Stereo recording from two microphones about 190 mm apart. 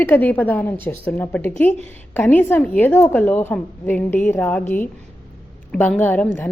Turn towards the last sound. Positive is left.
turn(degrees=10)  # may be behind; listen again after turning